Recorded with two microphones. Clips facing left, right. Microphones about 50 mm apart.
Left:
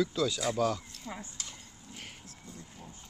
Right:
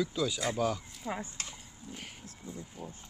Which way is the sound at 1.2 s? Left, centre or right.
Right.